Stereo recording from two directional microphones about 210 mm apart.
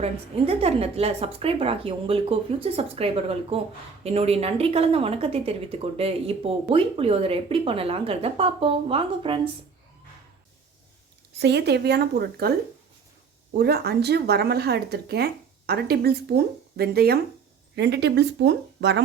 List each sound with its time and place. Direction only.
0.0 s speech: 30° right (ahead or behind)
11.3 s speech: 50° right (ahead or behind)
13.6 s speech: 50° right (ahead or behind)